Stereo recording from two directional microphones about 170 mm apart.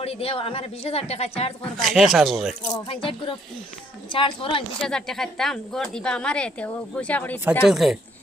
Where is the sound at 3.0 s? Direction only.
30° left (ahead or behind).